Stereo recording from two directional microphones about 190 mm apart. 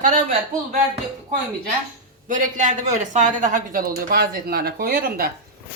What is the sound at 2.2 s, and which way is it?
Speech, 40° right (ahead or behind).